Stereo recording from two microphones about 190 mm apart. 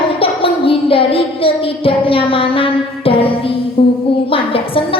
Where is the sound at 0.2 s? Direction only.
30° left (ahead or behind).